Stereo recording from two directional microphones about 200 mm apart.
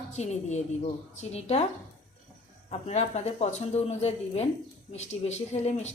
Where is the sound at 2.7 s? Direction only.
35° left (ahead or behind).